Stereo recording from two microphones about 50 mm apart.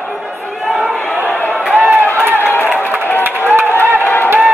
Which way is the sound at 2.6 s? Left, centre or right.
Right.